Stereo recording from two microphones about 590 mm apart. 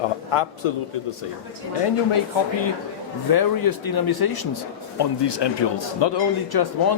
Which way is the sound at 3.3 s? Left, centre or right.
Left.